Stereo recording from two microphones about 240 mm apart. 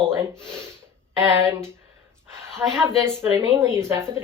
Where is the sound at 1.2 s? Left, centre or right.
Centre.